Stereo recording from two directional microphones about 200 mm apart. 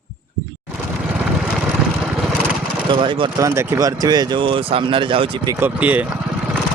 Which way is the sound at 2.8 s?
25° right (ahead or behind).